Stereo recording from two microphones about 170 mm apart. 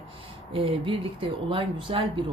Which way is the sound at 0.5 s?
30° right (ahead or behind).